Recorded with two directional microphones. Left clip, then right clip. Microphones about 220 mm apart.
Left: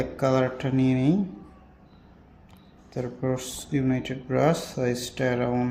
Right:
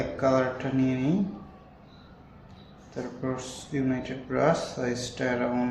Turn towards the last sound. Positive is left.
turn(degrees=40)  # may be behind; listen again after turning